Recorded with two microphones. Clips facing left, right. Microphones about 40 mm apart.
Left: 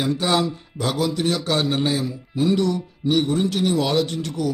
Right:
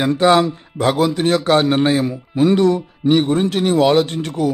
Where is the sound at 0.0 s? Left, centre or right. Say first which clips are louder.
Right 7 dB; right.